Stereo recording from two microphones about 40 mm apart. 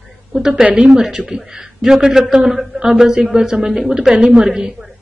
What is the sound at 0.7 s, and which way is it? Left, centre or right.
A woman's voice, centre.